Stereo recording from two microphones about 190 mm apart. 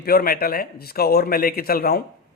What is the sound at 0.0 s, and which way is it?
A man's voice, 55° left (ahead or behind).